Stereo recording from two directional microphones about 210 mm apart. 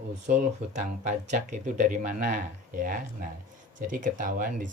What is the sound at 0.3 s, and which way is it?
Speech, 35° right (ahead or behind).